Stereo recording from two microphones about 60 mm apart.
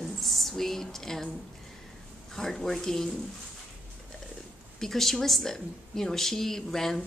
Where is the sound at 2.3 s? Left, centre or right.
Centre.